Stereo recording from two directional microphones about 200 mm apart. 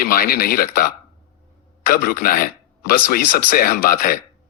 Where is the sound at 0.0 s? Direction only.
45° left (ahead or behind).